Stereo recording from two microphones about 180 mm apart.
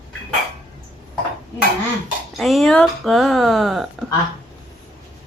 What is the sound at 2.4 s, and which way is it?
Speech, centre (ahead or behind).